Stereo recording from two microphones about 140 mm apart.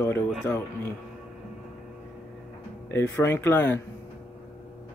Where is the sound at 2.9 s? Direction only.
15° left (ahead or behind).